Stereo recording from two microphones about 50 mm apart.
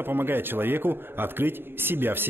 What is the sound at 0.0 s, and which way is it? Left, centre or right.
A man's voice, right.